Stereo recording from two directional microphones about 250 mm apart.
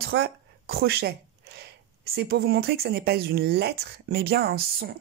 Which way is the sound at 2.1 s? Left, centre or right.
Right.